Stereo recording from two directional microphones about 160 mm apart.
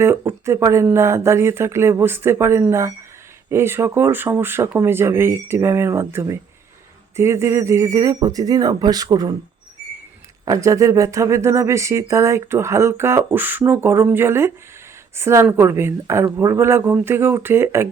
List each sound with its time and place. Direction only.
0.0 s speech: 15° right (ahead or behind)
10.4 s speech: 20° right (ahead or behind)